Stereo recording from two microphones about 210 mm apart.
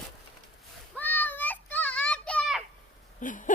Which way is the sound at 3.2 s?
40° left (ahead or behind).